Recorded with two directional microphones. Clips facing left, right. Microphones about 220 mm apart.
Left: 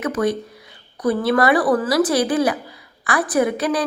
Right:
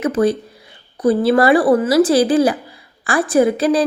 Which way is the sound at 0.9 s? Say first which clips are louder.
Right 4 dB; 30° right (ahead or behind).